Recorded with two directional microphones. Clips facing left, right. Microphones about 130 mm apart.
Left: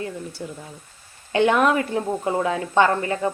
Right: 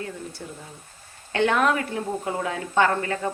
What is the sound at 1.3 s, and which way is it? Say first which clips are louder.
Speech: left 3 dB; 15° left (ahead or behind).